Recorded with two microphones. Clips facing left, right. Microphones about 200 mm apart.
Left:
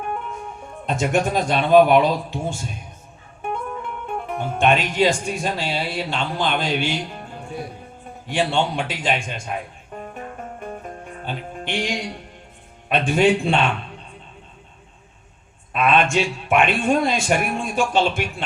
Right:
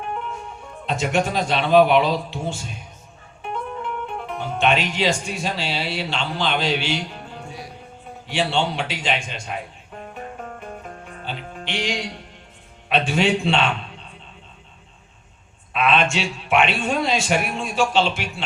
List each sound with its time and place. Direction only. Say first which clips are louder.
0.9 s a man's voice: left 1 dB; 50° left (ahead or behind)
4.0 s a man's voice: left 2 dB; 50° left (ahead or behind)
11.3 s music: left 2 dB; 50° left (ahead or behind)
12.9 s a man's voice: left 3 dB; 50° left (ahead or behind)
15.7 s a man's voice: left 2 dB; 50° left (ahead or behind)